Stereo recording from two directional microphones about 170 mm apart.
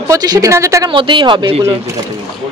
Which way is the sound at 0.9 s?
30° right (ahead or behind).